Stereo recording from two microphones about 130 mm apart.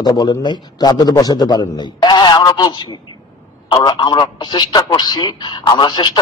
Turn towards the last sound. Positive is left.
turn(degrees=35)  # may be behind; listen again after turning